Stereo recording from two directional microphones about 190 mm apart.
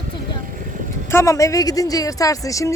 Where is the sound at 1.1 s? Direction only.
15° left (ahead or behind).